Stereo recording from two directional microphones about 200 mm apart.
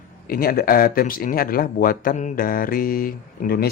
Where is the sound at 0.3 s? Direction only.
50° left (ahead or behind).